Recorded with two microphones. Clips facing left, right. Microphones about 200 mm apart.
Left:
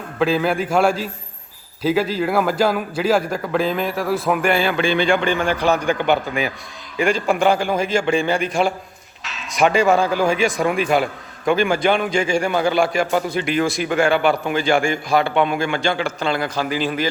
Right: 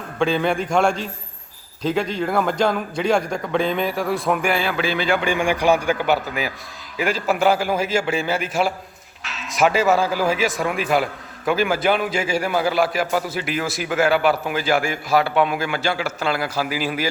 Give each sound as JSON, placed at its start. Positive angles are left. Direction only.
{"t": 0.2, "sound": "a man's voice", "side_deg": 5}